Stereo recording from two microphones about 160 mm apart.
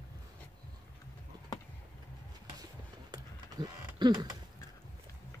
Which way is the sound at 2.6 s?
25° right (ahead or behind).